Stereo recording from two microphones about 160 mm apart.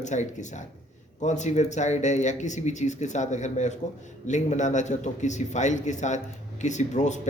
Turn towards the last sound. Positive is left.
turn(degrees=45)  # may be behind; listen again after turning